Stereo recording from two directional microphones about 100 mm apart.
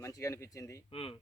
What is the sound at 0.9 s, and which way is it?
Speech, 70° left (ahead or behind).